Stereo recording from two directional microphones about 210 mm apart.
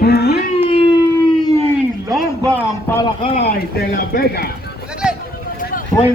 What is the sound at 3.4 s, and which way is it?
Speech, 50° left (ahead or behind).